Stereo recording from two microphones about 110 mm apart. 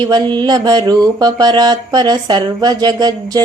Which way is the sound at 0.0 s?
45° right (ahead or behind).